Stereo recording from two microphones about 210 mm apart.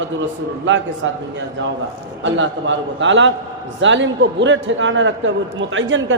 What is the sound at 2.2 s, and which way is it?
A man's voice, 60° right (ahead or behind).